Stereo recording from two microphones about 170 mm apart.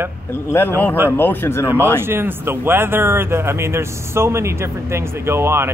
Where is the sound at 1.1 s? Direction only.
10° left (ahead or behind).